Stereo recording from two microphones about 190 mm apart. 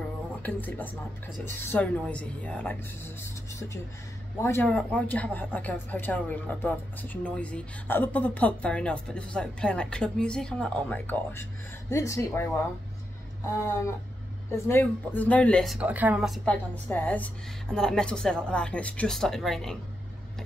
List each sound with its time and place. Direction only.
0.4 s speech: 10° left (ahead or behind)
14.7 s speech: 10° left (ahead or behind)